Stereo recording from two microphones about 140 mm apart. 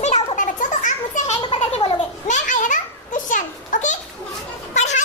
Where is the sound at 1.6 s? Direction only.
50° left (ahead or behind).